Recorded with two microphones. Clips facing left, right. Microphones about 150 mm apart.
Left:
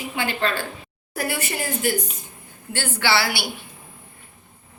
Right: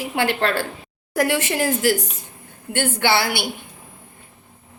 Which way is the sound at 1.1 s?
90° right.